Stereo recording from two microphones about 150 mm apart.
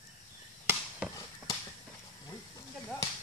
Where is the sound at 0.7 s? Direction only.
5° right (ahead or behind).